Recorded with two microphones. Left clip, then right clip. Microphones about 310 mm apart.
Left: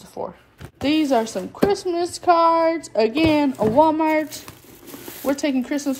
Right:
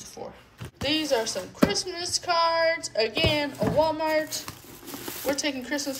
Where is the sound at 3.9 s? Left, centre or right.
Centre.